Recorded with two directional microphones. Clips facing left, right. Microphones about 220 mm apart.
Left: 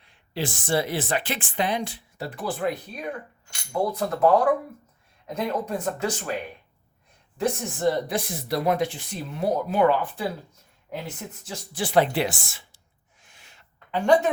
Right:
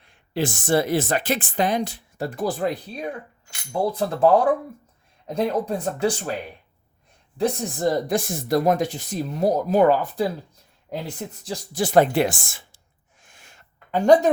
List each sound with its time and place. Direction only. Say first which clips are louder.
0.0 s speech: right 5 dB; 50° right (ahead or behind); by 6.3 s 30° right (ahead or behind)
7.3 s speech: right 3 dB; 40° right (ahead or behind)
11.4 s speech: right 5 dB; 40° right (ahead or behind)
13.2 s a sound: right 3 dB; 50° right (ahead or behind)